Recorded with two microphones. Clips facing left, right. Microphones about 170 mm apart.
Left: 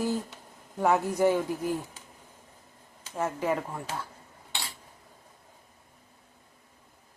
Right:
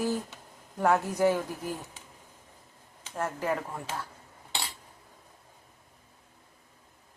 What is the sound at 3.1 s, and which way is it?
Speech, 5° left (ahead or behind).